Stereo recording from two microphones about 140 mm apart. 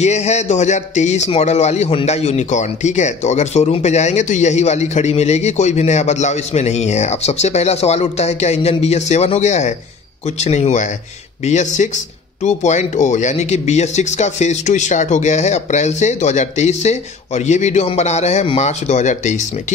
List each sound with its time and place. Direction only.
0.0 s speech: 55° left (ahead or behind)